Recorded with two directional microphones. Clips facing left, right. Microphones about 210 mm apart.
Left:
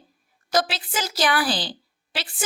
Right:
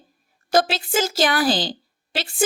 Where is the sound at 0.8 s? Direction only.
45° right (ahead or behind).